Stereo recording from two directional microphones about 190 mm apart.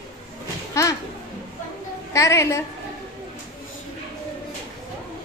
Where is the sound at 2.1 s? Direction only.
15° left (ahead or behind).